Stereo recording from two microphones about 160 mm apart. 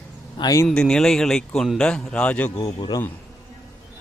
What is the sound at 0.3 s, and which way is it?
Speech, 20° left (ahead or behind).